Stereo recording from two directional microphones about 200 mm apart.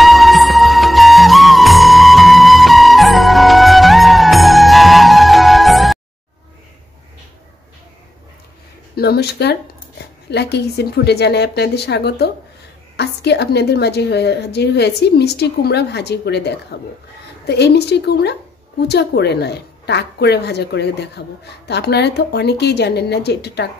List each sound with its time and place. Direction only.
0.0 s music: centre (ahead or behind)
8.9 s a woman's voice: 55° left (ahead or behind)